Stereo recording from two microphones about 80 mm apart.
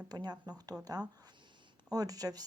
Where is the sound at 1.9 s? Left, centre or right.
Right.